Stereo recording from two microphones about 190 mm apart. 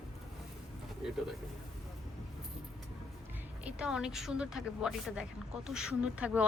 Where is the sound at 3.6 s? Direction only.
5° right (ahead or behind).